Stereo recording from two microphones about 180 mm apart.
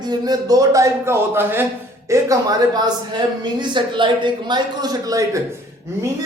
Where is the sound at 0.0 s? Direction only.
20° right (ahead or behind).